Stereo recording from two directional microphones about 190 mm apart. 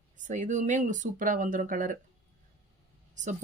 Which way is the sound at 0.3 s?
40° right (ahead or behind).